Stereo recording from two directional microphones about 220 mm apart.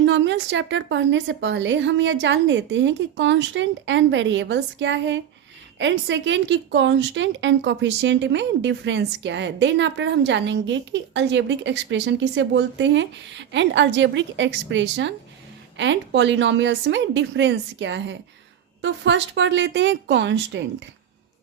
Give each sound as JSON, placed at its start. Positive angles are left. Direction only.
{"t": 0.0, "sound": "speech", "side_deg": -55}